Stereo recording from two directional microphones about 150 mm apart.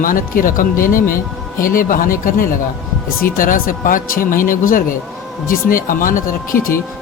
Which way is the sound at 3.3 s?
65° left (ahead or behind).